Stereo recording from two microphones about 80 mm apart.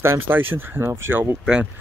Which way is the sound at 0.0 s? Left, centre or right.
Right.